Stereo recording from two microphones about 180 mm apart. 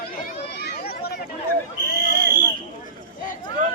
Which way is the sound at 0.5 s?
65° left (ahead or behind).